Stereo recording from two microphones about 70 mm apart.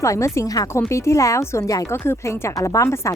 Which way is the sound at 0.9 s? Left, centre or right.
Left.